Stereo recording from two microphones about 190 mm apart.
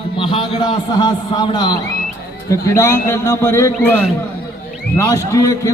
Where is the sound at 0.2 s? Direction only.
25° left (ahead or behind).